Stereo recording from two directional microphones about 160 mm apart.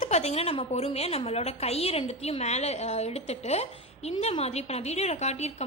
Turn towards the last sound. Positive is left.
turn(degrees=45)  # may be behind; listen again after turning